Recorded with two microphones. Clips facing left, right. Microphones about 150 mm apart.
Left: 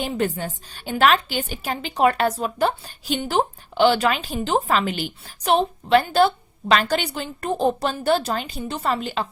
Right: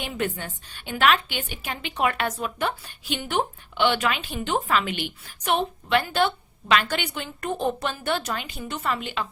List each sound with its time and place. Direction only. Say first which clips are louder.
0.0 s a woman's voice: left 5 dB; 35° left (ahead or behind)